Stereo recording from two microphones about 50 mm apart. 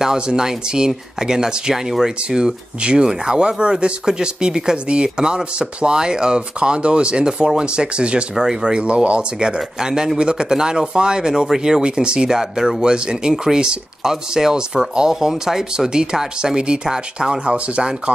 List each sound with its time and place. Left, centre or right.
0.0 s speech: centre